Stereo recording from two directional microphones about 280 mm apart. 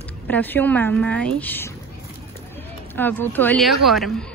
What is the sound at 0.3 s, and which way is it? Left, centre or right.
Speech, centre.